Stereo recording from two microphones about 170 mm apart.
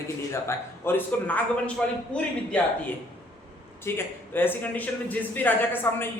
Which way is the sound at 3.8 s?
15° left (ahead or behind).